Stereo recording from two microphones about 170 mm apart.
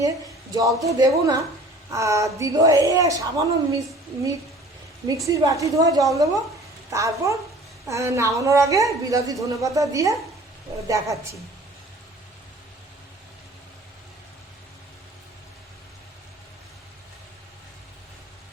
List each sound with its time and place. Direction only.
0.8 s a woman's voice: 20° right (ahead or behind)
5.0 s a woman's voice: 20° right (ahead or behind)